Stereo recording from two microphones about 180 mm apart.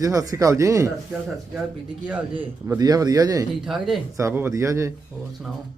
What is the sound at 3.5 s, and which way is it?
Speech, centre (ahead or behind).